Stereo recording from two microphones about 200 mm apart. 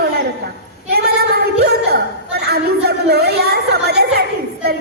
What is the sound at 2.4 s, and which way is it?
A woman's voice, 55° right (ahead or behind).